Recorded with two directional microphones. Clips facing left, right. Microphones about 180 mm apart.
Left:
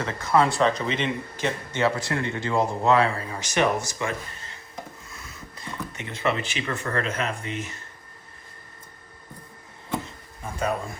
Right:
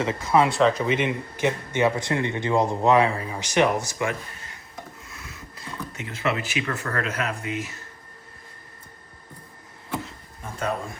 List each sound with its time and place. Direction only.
0.0 s speech: 5° right (ahead or behind)
5.2 s a sound: 5° right (ahead or behind)
6.9 s speech: 5° right (ahead or behind)